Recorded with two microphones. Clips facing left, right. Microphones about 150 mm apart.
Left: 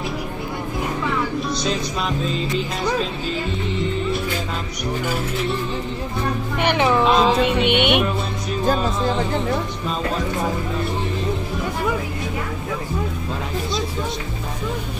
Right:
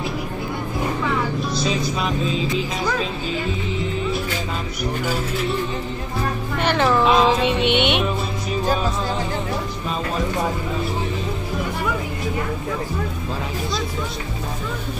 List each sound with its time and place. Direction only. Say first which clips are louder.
1.5 s music: right 1 dB; centre (ahead or behind)
6.6 s music: even; 15° left (ahead or behind)
7.1 s music: even; 5° left (ahead or behind)